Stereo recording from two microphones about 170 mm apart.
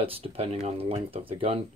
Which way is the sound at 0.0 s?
35° right (ahead or behind).